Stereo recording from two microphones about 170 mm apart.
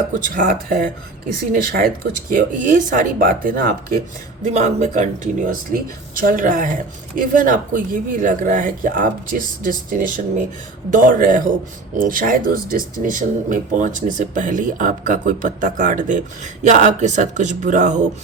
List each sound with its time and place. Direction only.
0.1 s speech: 55° right (ahead or behind)
2.3 s speech: 50° right (ahead or behind)
4.4 s speech: 45° right (ahead or behind)